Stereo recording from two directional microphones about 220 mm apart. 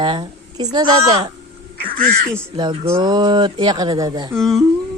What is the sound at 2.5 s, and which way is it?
A child's voice, 20° right (ahead or behind).